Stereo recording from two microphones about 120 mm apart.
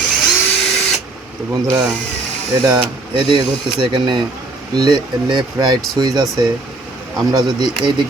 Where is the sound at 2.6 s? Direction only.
40° right (ahead or behind).